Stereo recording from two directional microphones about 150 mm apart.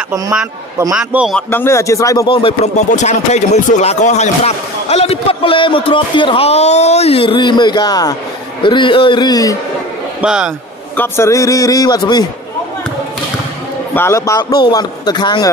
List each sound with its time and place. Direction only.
0.9 s a man's voice: 5° right (ahead or behind)
1.3 s a man's voice: 15° left (ahead or behind)
2.2 s speech: 35° left (ahead or behind)
2.9 s speech: 50° left (ahead or behind); by 9.6 s 25° left (ahead or behind)
10.2 s a man's voice: 5° right (ahead or behind)
11.0 s a man's voice: 20° left (ahead or behind)
13.9 s a man's voice: 20° left (ahead or behind)